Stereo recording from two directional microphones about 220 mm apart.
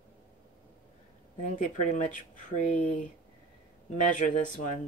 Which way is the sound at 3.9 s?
35° left (ahead or behind).